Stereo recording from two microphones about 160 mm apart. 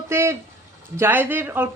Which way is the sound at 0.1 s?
15° right (ahead or behind).